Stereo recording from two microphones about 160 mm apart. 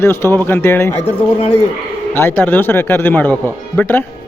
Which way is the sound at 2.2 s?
15° left (ahead or behind).